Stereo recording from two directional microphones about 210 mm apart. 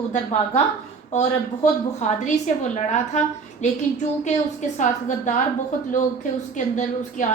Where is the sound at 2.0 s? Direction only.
35° left (ahead or behind).